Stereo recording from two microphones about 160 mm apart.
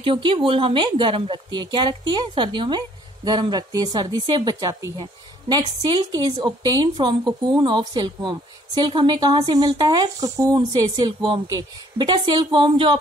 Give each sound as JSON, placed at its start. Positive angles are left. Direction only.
{"t": 0.0, "sound": "a woman's voice", "side_deg": -35}